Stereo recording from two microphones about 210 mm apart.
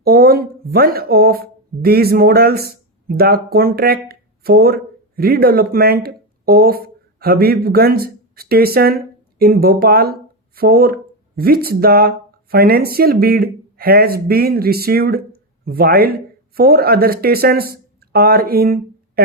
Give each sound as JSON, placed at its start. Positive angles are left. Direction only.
{"t": 0.0, "sound": "speech", "side_deg": -50}